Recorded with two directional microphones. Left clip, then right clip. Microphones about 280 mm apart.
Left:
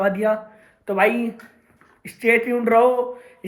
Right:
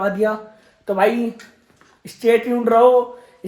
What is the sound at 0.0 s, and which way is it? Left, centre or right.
Speech, centre.